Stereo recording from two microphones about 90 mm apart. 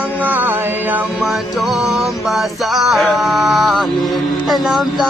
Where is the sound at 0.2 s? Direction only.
20° right (ahead or behind).